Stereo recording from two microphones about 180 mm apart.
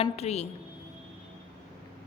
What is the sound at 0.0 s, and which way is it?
Speech, 35° left (ahead or behind).